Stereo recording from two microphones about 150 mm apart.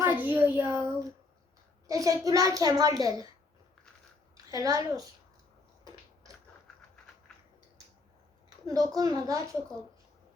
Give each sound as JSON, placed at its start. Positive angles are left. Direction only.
{"t": 0.0, "sound": "a sound", "side_deg": -10}
{"t": 0.3, "sound": "a child's voice", "side_deg": -15}
{"t": 1.9, "sound": "a child's voice", "side_deg": -20}
{"t": 4.5, "sound": "a child's voice", "side_deg": -20}
{"t": 8.4, "sound": "a woman's voice", "side_deg": -25}